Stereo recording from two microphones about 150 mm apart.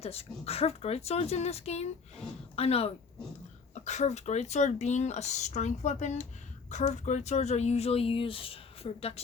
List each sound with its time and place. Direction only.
0.0 s speech: 40° left (ahead or behind)